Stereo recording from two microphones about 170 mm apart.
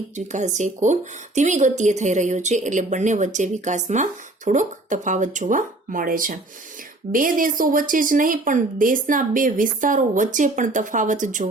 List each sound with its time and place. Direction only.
0.3 s speech: 45° right (ahead or behind)